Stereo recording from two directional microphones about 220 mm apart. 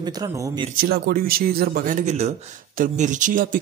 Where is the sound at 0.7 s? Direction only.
45° right (ahead or behind).